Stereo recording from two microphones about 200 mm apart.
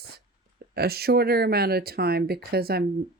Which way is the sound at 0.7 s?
50° right (ahead or behind).